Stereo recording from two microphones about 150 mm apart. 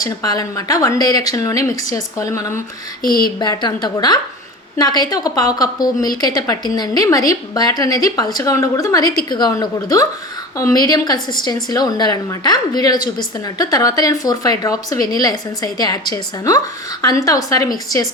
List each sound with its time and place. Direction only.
0.0 s a woman's voice: 25° left (ahead or behind)
3.0 s speech: 75° left (ahead or behind)
3.4 s a woman's voice: 30° left (ahead or behind)